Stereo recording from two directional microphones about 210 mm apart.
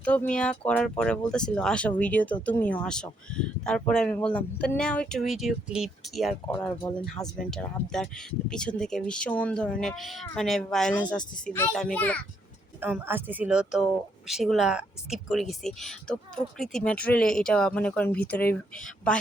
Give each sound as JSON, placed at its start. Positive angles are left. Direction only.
{"t": 0.0, "sound": "speech", "side_deg": 5}
{"t": 12.8, "sound": "speech", "side_deg": -10}
{"t": 18.3, "sound": "speech", "side_deg": 50}